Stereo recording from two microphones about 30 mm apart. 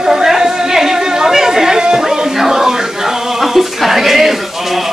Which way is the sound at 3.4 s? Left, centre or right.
Centre.